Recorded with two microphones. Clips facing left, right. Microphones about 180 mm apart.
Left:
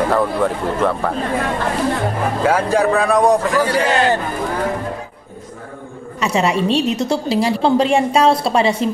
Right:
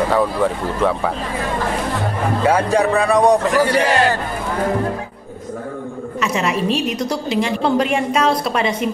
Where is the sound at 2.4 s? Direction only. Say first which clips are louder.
Even; centre (ahead or behind).